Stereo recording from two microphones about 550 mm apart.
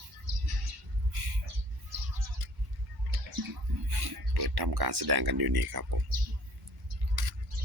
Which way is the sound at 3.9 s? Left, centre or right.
Right.